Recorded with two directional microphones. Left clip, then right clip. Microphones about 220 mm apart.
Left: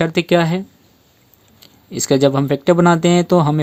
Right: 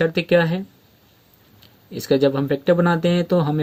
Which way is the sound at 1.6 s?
35° left (ahead or behind).